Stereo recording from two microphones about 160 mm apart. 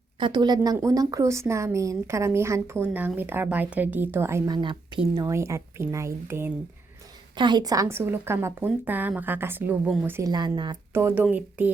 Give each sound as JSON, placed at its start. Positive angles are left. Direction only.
{"t": 0.2, "sound": "a woman's voice", "side_deg": -30}
{"t": 4.5, "sound": "a woman's voice", "side_deg": -30}
{"t": 7.3, "sound": "a woman's voice", "side_deg": -30}
{"t": 10.9, "sound": "a woman's voice", "side_deg": -15}